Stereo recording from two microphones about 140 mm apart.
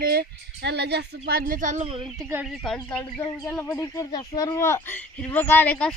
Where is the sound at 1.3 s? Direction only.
90° right; by 1.9 s 60° right (ahead or behind).